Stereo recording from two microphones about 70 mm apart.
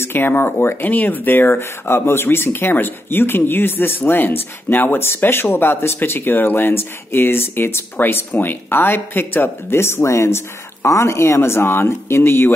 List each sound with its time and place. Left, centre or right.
0.0 s speech: left